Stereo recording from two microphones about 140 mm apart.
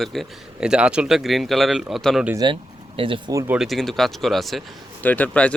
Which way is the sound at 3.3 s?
20° right (ahead or behind).